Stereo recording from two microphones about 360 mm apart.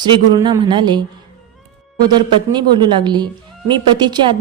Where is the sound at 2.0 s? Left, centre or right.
Centre.